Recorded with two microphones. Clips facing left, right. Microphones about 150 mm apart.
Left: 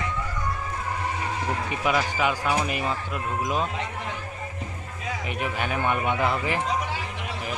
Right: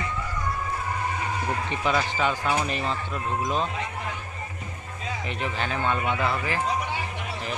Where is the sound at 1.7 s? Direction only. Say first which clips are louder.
Left 1 dB; 10° left (ahead or behind).